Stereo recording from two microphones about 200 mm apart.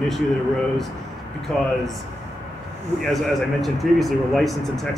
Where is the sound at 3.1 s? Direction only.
Centre (ahead or behind).